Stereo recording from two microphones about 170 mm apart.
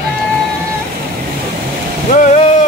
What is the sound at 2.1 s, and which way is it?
Boat, 50° left (ahead or behind).